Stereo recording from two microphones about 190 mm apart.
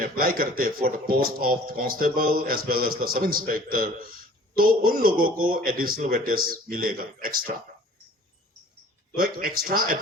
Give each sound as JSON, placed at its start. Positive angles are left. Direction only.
{"t": 0.0, "sound": "speech", "side_deg": -50}
{"t": 9.1, "sound": "speech", "side_deg": -50}